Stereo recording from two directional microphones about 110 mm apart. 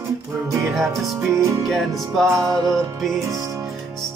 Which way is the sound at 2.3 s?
30° right (ahead or behind).